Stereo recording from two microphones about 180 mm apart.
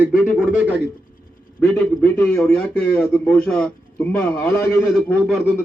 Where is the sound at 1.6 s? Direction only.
5° left (ahead or behind).